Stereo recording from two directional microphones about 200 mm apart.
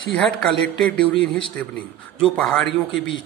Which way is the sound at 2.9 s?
65° left (ahead or behind).